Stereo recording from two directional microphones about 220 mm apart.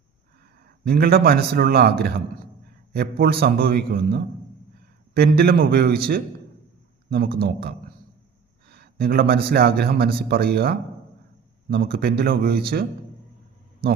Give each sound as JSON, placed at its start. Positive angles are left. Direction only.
{"t": 0.9, "sound": "a man's voice", "side_deg": -45}
{"t": 7.1, "sound": "a man's voice", "side_deg": -45}